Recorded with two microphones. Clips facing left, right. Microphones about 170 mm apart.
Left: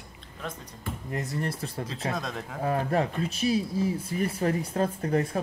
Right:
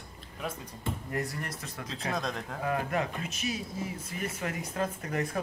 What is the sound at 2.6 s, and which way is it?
Speech, 35° left (ahead or behind).